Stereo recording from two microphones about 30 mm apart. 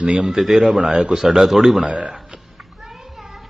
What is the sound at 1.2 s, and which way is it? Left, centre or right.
Speech, centre.